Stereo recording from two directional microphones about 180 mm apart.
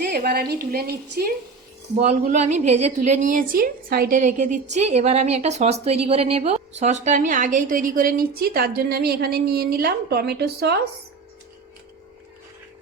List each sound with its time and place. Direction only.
0.0 s a woman's voice: 55° right (ahead or behind)
2.0 s a woman's voice: 40° right (ahead or behind); by 4.2 s 55° right (ahead or behind)
4.2 s a woman's voice: 40° right (ahead or behind); by 10.8 s 65° right (ahead or behind)